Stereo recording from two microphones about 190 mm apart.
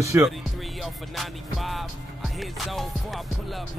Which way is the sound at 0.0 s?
15° right (ahead or behind).